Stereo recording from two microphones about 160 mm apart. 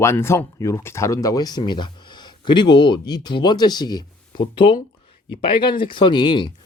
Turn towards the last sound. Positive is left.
turn(degrees=30)  # may be behind; listen again after turning